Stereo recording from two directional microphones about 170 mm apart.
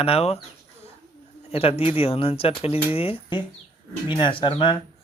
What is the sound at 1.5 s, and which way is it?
Speech, 35° left (ahead or behind).